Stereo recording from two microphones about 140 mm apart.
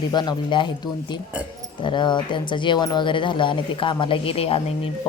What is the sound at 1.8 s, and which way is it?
Speech, 35° left (ahead or behind).